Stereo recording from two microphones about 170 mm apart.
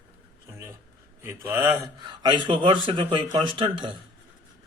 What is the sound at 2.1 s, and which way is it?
Speech, 25° right (ahead or behind).